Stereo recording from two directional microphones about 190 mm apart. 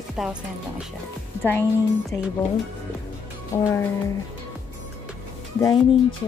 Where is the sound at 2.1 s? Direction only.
70° left (ahead or behind).